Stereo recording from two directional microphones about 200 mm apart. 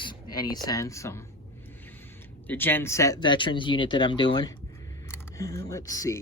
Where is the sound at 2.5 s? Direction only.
10° left (ahead or behind).